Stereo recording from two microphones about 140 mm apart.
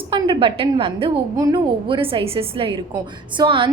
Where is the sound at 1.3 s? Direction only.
25° right (ahead or behind).